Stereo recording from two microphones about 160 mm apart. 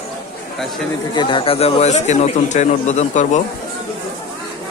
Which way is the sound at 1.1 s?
30° left (ahead or behind).